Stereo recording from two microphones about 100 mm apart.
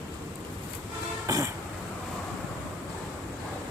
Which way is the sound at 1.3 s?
35° right (ahead or behind).